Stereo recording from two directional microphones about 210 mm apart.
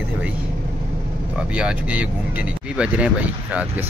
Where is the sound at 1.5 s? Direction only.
5° right (ahead or behind).